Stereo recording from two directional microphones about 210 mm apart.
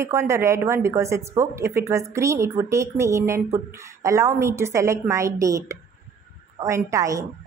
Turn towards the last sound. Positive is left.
turn(degrees=-15)  # may be behind; listen again after turning